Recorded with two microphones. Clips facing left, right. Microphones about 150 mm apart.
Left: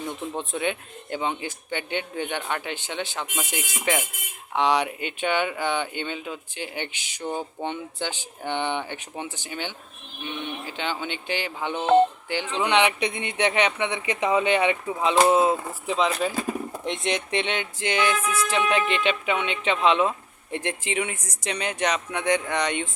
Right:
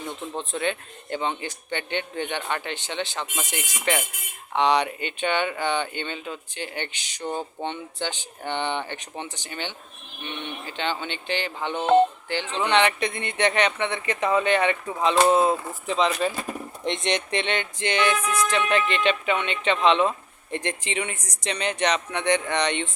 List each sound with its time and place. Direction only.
0.3 s music: 10° left (ahead or behind)
11.8 s speech: centre (ahead or behind)
12.3 s music: 10° left (ahead or behind)